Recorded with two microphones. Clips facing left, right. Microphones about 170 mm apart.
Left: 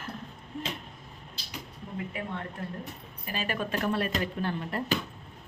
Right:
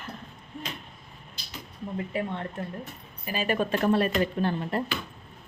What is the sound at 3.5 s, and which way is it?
Speech, 30° right (ahead or behind).